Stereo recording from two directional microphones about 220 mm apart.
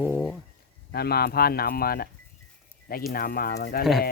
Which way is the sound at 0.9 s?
45° left (ahead or behind).